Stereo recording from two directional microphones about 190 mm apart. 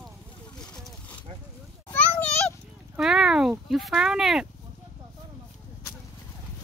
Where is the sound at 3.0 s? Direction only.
5° right (ahead or behind).